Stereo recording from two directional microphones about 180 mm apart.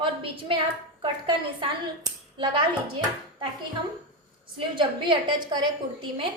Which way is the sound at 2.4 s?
25° right (ahead or behind).